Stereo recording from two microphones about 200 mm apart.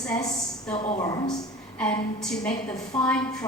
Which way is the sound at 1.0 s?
20° left (ahead or behind).